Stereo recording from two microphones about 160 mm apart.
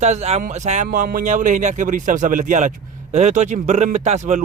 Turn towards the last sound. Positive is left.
turn(degrees=-45)  # may be behind; listen again after turning